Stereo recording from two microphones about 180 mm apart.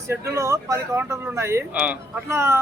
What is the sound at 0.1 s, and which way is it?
Speech, 15° right (ahead or behind).